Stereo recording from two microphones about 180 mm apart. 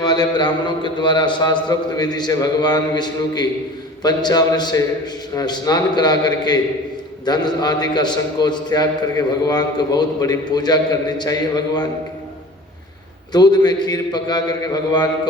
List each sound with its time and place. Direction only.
0.0 s a man's voice: 25° left (ahead or behind)
13.3 s a man's voice: 20° left (ahead or behind)